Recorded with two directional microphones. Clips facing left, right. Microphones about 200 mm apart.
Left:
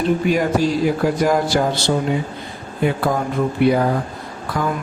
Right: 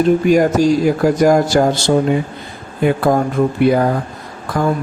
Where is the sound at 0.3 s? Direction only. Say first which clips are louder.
Right 6 dB; 45° right (ahead or behind).